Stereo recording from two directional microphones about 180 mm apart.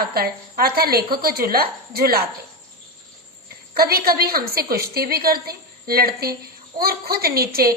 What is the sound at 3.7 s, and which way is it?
A woman's voice, 60° right (ahead or behind).